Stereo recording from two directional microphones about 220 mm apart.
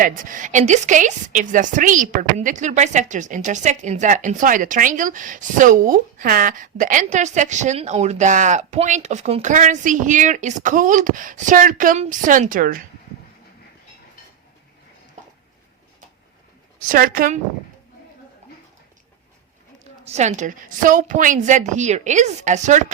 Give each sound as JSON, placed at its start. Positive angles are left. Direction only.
{"t": 0.0, "sound": "a woman's voice", "side_deg": -35}
{"t": 16.8, "sound": "a woman's voice", "side_deg": -40}
{"t": 20.1, "sound": "a woman's voice", "side_deg": -30}